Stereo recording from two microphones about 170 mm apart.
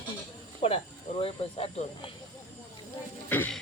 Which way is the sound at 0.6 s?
35° left (ahead or behind).